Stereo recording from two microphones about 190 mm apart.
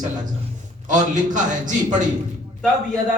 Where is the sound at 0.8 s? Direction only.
40° right (ahead or behind).